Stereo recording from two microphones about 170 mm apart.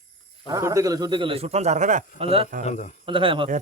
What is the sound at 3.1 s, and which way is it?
Speech, 30° right (ahead or behind).